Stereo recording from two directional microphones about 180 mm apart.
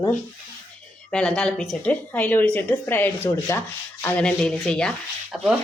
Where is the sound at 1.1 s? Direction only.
5° left (ahead or behind).